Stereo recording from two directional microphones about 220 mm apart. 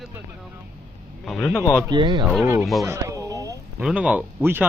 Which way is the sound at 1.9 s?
20° right (ahead or behind).